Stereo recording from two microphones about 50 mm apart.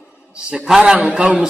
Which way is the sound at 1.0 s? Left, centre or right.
Right.